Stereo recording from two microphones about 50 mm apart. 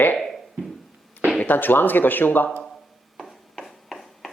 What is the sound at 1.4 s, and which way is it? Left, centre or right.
Speech, left.